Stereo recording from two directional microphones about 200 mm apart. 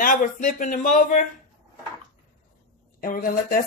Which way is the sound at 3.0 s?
45° left (ahead or behind).